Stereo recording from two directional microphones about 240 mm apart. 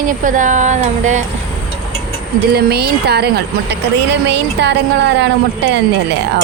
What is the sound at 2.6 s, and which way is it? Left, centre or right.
Speech, right.